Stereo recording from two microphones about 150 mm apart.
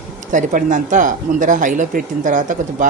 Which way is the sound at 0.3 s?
60° right (ahead or behind).